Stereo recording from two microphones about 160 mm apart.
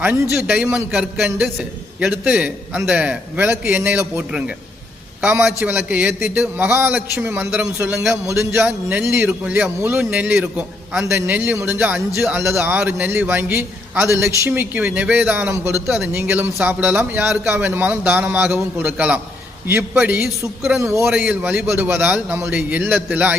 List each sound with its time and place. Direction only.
0.0 s a man's voice: 10° right (ahead or behind)
20.8 s a man's voice: 15° right (ahead or behind)
21.1 s a man's voice: 5° right (ahead or behind)